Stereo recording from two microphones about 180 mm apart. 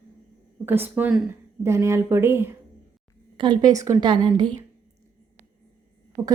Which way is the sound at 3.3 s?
25° right (ahead or behind).